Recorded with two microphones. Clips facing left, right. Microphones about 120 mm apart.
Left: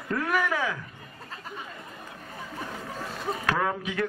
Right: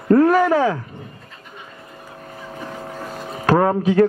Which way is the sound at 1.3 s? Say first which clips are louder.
Left 2 dB; 35° left (ahead or behind).